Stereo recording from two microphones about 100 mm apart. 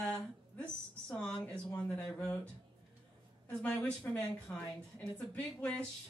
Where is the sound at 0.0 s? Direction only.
15° left (ahead or behind).